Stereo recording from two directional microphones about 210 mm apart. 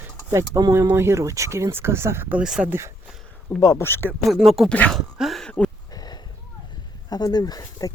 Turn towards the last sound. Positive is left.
turn(degrees=15)  # may be behind; listen again after turning